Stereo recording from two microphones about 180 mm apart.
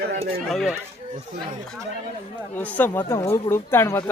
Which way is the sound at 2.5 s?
10° left (ahead or behind).